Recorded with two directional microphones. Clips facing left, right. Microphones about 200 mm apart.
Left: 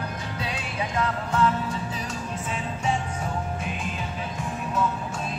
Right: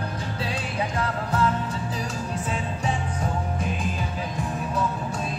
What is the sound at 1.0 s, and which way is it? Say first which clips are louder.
Music: left 3 dB; 35° right (ahead or behind).